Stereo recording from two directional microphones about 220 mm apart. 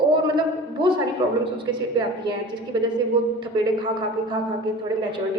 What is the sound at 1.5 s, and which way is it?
A woman's voice, 20° right (ahead or behind).